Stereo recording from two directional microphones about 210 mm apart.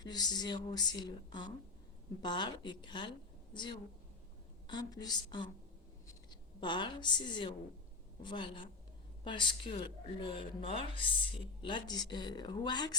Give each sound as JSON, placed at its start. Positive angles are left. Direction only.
{"t": 0.0, "sound": "a woman's voice", "side_deg": 20}